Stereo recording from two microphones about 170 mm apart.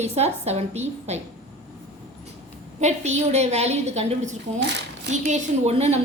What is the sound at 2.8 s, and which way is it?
A woman's voice, 40° right (ahead or behind).